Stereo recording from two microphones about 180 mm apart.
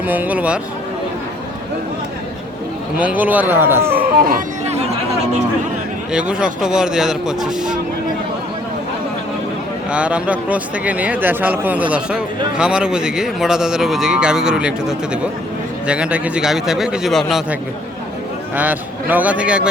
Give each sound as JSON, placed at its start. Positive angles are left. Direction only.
{"t": 0.0, "sound": "a man's voice", "side_deg": -10}
{"t": 3.0, "sound": "a man's voice", "side_deg": -10}
{"t": 4.0, "sound": "speech", "side_deg": -55}
{"t": 6.1, "sound": "speech", "side_deg": -5}
{"t": 9.9, "sound": "a man's voice", "side_deg": -5}